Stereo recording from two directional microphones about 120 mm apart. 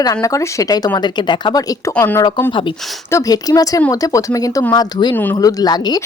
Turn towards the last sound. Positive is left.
turn(degrees=35)  # may be behind; listen again after turning